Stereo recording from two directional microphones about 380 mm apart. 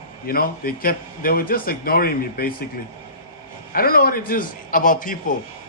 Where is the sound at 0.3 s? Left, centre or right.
Left.